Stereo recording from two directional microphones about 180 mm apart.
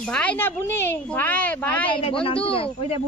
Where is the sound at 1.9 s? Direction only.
30° left (ahead or behind).